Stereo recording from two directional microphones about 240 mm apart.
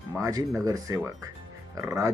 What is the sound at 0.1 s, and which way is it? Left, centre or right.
Speech, centre.